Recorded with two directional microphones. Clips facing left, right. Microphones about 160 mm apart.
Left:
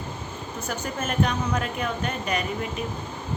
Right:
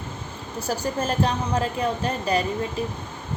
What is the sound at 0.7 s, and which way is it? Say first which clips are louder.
A woman's voice: right 5 dB; 35° right (ahead or behind).